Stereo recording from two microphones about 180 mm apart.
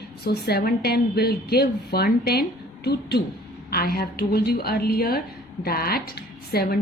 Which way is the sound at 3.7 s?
55° left (ahead or behind).